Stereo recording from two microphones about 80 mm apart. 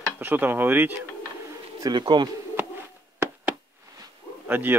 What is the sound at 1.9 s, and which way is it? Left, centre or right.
Speech, right.